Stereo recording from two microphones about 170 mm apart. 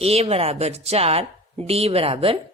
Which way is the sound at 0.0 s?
35° right (ahead or behind).